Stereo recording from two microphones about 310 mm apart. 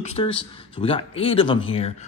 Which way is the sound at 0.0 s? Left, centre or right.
Centre.